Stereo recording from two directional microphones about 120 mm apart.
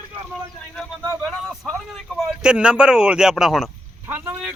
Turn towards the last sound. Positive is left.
turn(degrees=-15)  # may be behind; listen again after turning